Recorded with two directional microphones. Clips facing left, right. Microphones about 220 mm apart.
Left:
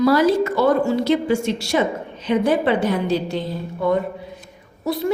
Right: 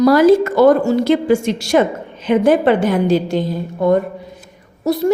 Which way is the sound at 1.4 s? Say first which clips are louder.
Right 4 dB; 90° right.